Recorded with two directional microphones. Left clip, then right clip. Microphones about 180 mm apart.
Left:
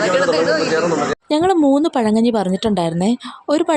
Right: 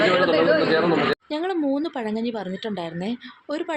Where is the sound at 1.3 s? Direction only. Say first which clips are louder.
Left 10 dB; 55° left (ahead or behind).